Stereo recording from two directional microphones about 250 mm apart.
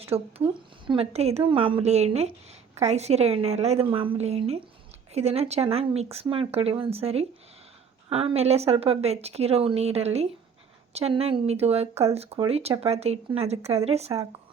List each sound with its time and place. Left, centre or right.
0.1 s a woman's voice: right